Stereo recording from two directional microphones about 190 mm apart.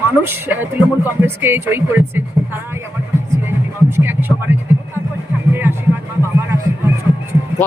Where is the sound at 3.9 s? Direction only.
10° right (ahead or behind).